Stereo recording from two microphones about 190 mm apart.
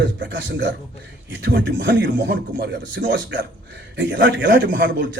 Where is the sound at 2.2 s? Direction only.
65° right (ahead or behind).